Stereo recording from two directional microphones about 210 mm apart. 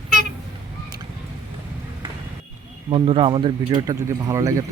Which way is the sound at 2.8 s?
25° right (ahead or behind).